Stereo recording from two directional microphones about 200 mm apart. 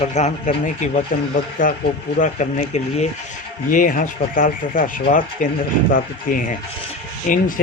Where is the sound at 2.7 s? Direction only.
35° left (ahead or behind).